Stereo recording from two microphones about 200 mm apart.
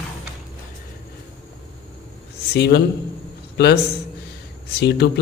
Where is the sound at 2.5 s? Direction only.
55° left (ahead or behind).